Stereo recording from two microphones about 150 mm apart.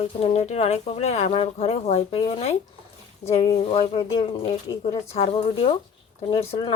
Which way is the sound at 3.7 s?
40° left (ahead or behind).